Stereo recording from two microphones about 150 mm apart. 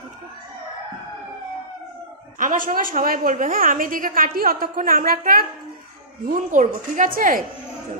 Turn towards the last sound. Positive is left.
turn(degrees=-65)  # may be behind; listen again after turning